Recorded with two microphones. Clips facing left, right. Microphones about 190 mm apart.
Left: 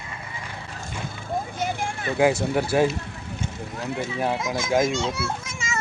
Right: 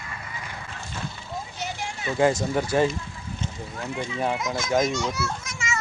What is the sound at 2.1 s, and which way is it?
Speech, 10° left (ahead or behind).